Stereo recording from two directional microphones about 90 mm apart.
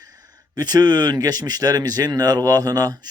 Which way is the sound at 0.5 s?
50° right (ahead or behind).